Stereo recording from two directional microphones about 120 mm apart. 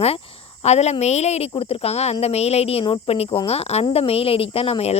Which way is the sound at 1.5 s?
50° left (ahead or behind).